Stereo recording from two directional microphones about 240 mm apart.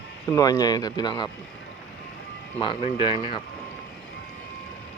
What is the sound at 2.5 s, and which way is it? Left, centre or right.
Speech, left.